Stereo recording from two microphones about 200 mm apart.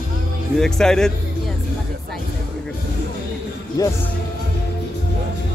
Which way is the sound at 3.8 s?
15° left (ahead or behind).